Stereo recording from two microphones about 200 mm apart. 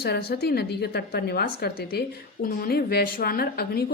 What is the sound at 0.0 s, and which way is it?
A woman's voice, 55° left (ahead or behind).